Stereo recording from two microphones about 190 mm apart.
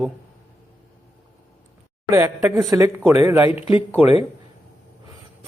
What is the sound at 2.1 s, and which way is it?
A man's voice, 15° right (ahead or behind).